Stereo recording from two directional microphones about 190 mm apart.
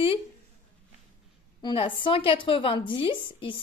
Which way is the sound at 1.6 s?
25° left (ahead or behind).